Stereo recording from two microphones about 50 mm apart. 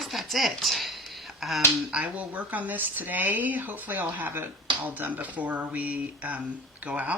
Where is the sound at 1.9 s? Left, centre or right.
Right.